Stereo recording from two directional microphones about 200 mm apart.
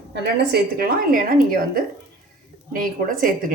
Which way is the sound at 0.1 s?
55° right (ahead or behind).